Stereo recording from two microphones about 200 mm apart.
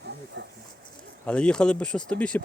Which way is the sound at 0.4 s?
60° right (ahead or behind).